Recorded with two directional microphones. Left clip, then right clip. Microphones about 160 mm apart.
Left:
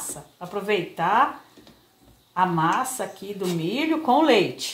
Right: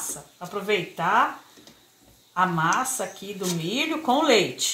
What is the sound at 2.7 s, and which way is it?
Speech, 25° left (ahead or behind).